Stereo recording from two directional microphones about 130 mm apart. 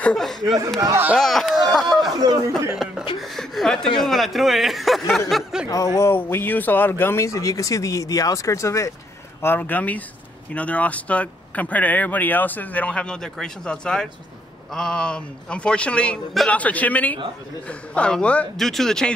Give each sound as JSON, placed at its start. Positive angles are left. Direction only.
{"t": 0.0, "sound": "speech", "side_deg": 5}
{"t": 0.7, "sound": "speech", "side_deg": -30}
{"t": 1.1, "sound": "speech", "side_deg": 0}
{"t": 2.1, "sound": "speech", "side_deg": -25}
{"t": 2.7, "sound": "speech", "side_deg": -5}
{"t": 5.9, "sound": "speech", "side_deg": 20}